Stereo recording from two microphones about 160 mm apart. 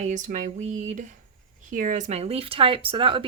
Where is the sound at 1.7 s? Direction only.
55° right (ahead or behind); by 3.2 s 35° right (ahead or behind).